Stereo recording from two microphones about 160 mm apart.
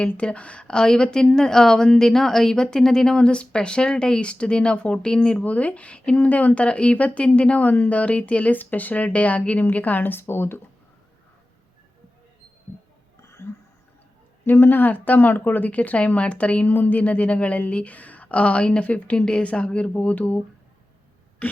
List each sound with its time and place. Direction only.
0.0 s a woman's voice: 5° left (ahead or behind)
13.2 s a sound: 15° left (ahead or behind)
14.4 s a woman's voice: 15° left (ahead or behind)
21.4 s a woman's voice: 10° left (ahead or behind)